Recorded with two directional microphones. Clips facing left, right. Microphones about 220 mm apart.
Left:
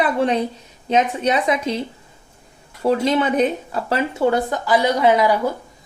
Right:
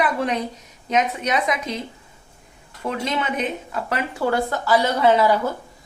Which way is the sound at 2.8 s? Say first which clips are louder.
Left 8 dB; 35° left (ahead or behind).